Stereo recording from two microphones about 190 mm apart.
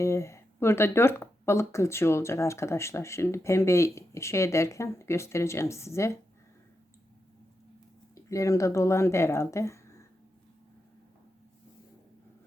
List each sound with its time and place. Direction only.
0.0 s speech: 15° left (ahead or behind)
8.1 s speech: 15° left (ahead or behind)